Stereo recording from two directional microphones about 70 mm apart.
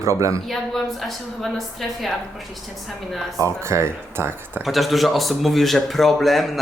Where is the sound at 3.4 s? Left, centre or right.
Right.